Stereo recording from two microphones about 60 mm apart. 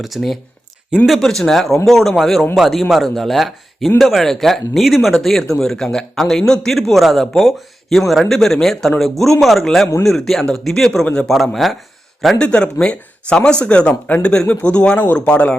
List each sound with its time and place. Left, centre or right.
0.0 s speech: centre
11.0 s speech: centre
11.5 s speech: centre
12.4 s speech: centre